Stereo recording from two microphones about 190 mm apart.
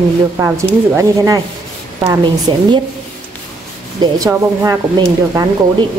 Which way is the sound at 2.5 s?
25° right (ahead or behind).